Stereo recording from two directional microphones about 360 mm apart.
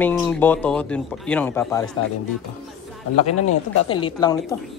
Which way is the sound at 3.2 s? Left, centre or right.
Left.